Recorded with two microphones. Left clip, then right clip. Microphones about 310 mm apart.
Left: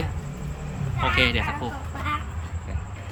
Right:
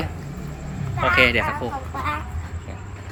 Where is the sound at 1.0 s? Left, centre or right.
Centre.